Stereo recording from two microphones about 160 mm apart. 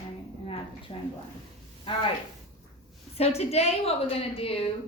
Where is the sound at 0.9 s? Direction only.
30° left (ahead or behind).